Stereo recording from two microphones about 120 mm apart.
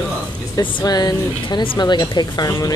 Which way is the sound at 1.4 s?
45° left (ahead or behind).